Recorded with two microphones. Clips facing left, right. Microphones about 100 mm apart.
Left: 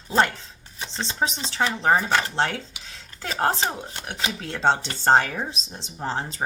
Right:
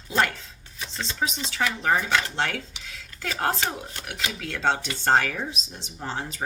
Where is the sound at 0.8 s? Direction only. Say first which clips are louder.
Left 3 dB; 30° left (ahead or behind).